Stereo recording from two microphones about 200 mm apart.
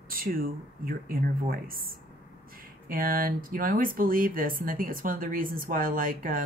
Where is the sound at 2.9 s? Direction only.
45° right (ahead or behind).